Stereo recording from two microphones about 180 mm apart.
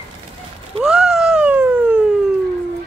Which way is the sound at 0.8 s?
5° right (ahead or behind).